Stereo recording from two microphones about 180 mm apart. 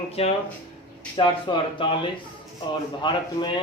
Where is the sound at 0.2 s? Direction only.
35° left (ahead or behind).